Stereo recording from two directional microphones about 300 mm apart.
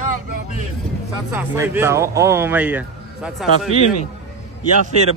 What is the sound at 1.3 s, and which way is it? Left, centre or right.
Speech, centre.